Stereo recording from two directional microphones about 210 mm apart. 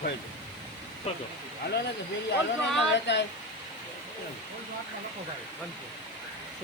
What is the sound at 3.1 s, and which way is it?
Speech, 55° left (ahead or behind).